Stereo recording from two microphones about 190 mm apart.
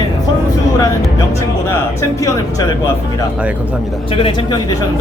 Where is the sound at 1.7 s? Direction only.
15° left (ahead or behind).